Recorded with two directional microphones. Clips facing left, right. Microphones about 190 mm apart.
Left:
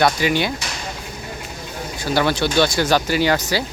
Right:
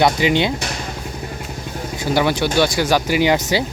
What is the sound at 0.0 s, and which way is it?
Speech, 20° right (ahead or behind).